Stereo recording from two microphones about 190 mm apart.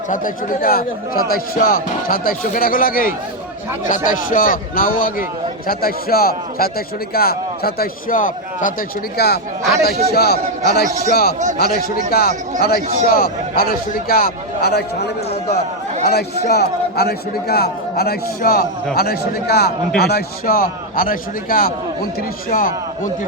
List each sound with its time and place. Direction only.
0.6 s a man's voice: 50° left (ahead or behind)
9.1 s a man's voice: 60° left (ahead or behind)
10.8 s a man's voice: 15° right (ahead or behind)
11.1 s a man's voice: 55° left (ahead or behind)